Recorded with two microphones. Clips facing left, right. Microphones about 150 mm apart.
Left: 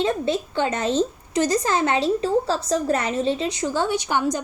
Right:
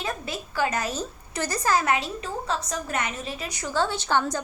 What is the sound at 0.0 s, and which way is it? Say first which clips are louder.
A woman's voice: left 10 dB; 30° left (ahead or behind).